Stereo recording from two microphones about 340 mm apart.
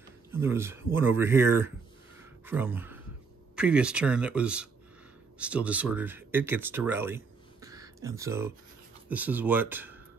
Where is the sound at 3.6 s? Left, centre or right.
Centre.